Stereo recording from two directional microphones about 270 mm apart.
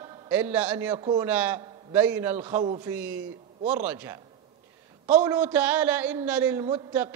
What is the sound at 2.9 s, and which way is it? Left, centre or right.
A man's voice, centre.